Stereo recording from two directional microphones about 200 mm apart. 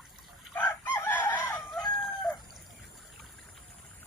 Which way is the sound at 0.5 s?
10° left (ahead or behind).